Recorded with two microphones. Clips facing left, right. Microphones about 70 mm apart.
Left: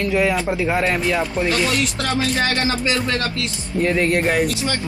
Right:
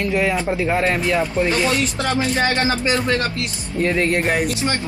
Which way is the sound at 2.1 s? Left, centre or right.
Right.